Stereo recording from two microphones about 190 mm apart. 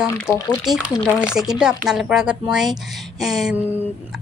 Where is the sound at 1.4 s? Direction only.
5° right (ahead or behind).